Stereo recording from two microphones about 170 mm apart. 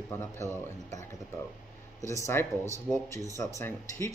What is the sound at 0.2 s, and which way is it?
Speech, 15° left (ahead or behind).